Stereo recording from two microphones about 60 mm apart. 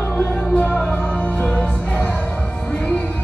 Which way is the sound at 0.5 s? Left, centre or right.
Left.